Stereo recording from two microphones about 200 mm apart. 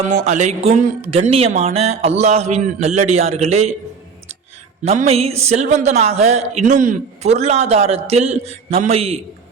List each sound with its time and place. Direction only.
0.3 s a man's voice: 35° right (ahead or behind)
4.9 s a man's voice: 30° right (ahead or behind)